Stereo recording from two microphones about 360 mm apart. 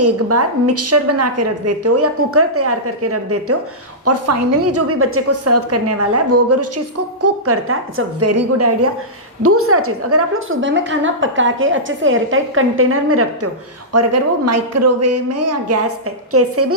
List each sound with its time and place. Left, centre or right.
0.0 s a woman's voice: right